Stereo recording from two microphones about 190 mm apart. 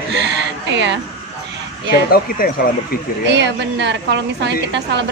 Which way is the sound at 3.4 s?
65° right (ahead or behind).